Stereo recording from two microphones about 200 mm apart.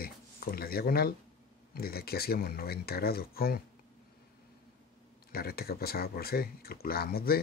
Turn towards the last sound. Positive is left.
turn(degrees=50)  # may be behind; listen again after turning